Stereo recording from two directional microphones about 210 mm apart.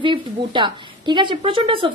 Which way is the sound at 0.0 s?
25° right (ahead or behind).